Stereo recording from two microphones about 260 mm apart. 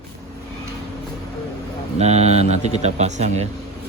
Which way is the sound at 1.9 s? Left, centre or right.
Right.